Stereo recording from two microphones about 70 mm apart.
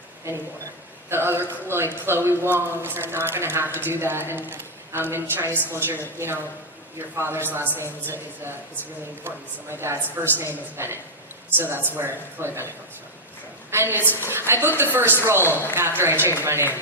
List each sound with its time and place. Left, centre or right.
1.1 s speech: right
9.2 s a woman's voice: right